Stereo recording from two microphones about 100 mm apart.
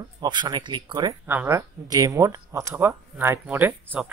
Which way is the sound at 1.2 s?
20° right (ahead or behind).